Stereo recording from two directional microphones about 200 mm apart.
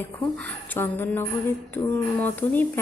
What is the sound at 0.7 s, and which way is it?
A woman's voice, 10° left (ahead or behind).